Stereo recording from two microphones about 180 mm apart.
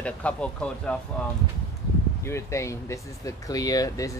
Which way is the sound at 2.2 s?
15° left (ahead or behind).